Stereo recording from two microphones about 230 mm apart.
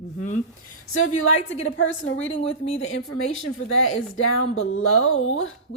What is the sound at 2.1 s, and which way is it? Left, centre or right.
Speech, left.